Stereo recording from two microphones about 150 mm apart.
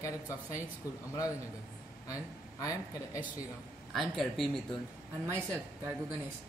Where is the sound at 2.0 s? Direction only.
25° left (ahead or behind).